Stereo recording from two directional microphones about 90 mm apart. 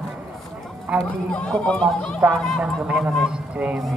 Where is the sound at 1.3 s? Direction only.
10° left (ahead or behind).